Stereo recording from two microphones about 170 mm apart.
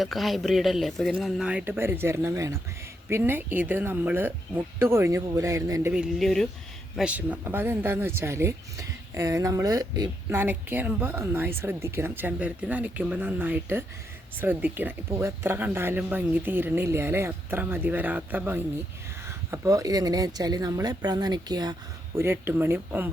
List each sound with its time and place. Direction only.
0.0 s speech: centre (ahead or behind); by 5.9 s 20° right (ahead or behind)
5.9 s speech: 5° right (ahead or behind)